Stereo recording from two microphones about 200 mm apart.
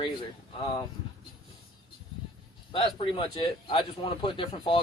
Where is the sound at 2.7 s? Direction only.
25° left (ahead or behind).